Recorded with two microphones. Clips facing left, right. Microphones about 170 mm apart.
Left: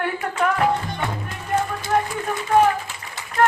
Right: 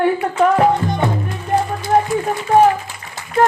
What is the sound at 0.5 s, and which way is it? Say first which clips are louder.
Music: right 7 dB; 40° right (ahead or behind).